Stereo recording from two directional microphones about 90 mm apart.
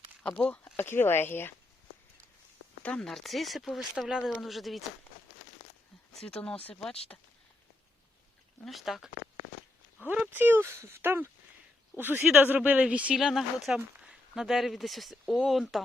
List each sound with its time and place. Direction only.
0.2 s speech: 10° left (ahead or behind)
0.6 s speech: 25° left (ahead or behind)
2.8 s speech: 10° left (ahead or behind)
3.1 s speech: centre (ahead or behind)
6.1 s speech: 10° left (ahead or behind)
7.1 s speech: 25° left (ahead or behind)
8.6 s speech: centre (ahead or behind)
10.0 s speech: 20° right (ahead or behind)
13.1 s speech: centre (ahead or behind)